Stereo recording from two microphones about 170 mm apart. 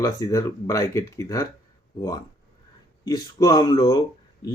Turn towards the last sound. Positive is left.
turn(degrees=20)  # may be behind; listen again after turning